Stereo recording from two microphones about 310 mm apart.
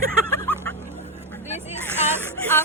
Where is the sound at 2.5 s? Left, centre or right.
Centre.